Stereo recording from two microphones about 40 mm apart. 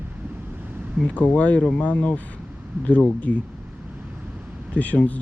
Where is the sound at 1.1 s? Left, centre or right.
Left.